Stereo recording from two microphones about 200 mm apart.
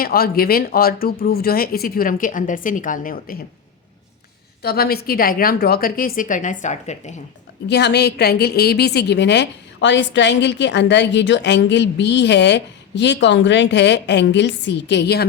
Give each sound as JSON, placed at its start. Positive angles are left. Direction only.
{"t": 0.0, "sound": "speech", "side_deg": 50}
{"t": 4.6, "sound": "speech", "side_deg": 50}
{"t": 7.7, "sound": "a woman's voice", "side_deg": 55}